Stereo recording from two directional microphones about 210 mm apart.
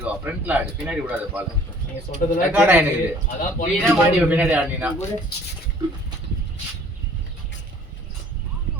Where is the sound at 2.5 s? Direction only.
10° right (ahead or behind).